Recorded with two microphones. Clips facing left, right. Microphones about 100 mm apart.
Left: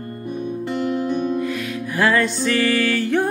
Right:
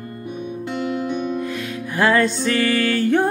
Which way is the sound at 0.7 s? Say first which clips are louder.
Left 2 dB; centre (ahead or behind).